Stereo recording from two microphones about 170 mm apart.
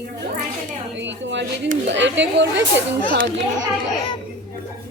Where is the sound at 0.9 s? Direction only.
90° right.